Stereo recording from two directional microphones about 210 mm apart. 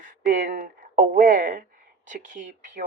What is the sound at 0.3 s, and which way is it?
Speech, 40° right (ahead or behind).